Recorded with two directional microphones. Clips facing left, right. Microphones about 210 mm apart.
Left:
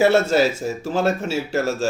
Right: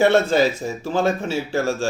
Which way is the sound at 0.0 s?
5° left (ahead or behind).